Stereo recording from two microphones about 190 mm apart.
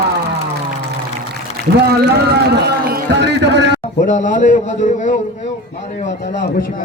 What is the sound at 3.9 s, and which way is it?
A man's voice, 40° left (ahead or behind).